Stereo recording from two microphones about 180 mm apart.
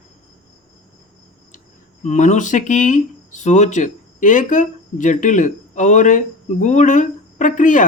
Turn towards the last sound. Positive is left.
turn(degrees=45)  # may be behind; listen again after turning